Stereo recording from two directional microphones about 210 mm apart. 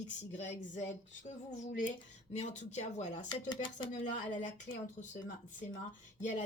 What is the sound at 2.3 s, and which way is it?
Speech, 30° left (ahead or behind).